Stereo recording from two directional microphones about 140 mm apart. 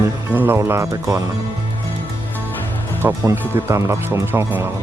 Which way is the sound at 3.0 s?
15° right (ahead or behind).